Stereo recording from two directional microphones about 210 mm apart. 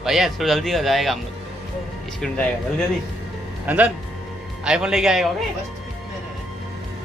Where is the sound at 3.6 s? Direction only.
5° right (ahead or behind).